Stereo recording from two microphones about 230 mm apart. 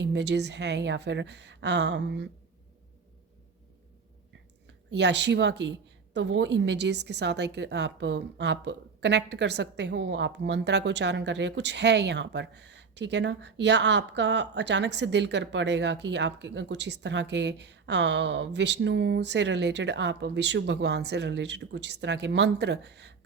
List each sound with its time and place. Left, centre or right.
0.0 s a woman's voice: right
4.9 s a woman's voice: right